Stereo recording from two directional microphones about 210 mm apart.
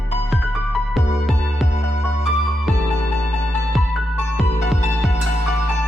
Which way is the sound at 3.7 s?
Centre (ahead or behind).